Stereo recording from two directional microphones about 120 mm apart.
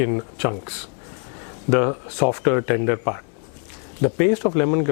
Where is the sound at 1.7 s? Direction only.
15° left (ahead or behind).